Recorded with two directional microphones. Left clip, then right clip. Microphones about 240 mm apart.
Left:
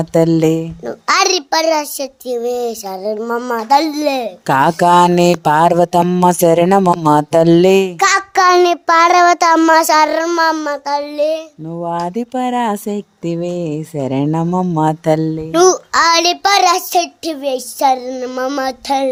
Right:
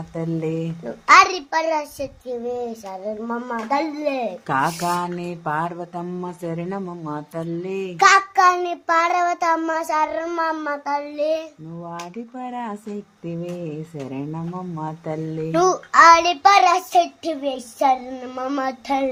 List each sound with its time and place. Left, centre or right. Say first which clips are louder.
0.1 s a child's voice: left 14 dB; left
7.9 s child singing: left 2 dB; left
11.8 s a child's voice: left 14 dB; left